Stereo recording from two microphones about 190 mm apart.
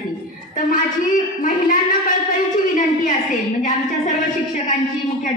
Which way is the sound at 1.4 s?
45° left (ahead or behind).